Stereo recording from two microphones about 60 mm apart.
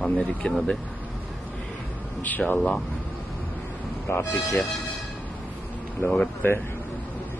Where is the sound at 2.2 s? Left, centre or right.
Left.